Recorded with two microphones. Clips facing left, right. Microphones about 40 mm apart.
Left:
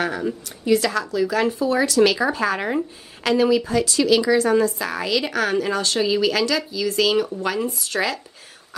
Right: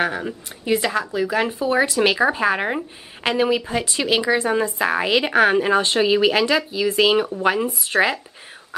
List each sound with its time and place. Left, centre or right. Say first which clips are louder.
0.0 s speech: right 1 dB; right